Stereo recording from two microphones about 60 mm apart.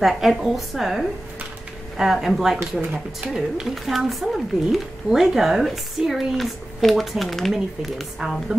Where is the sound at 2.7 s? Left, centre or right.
Right.